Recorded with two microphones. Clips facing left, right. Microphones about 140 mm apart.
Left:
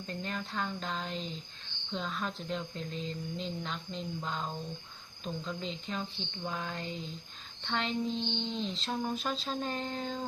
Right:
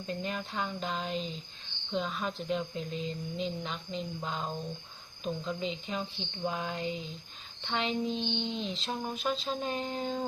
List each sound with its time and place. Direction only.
0.1 s speech: 10° right (ahead or behind)